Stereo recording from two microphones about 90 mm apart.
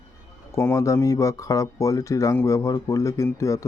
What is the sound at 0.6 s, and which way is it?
Speech, 35° left (ahead or behind).